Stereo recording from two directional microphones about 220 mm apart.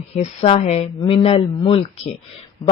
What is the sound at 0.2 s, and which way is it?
Speech, 30° left (ahead or behind).